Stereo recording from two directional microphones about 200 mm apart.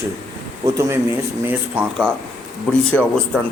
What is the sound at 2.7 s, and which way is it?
Speech, 5° left (ahead or behind).